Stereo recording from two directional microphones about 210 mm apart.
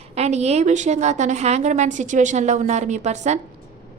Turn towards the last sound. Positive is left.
turn(degrees=-35)  # may be behind; listen again after turning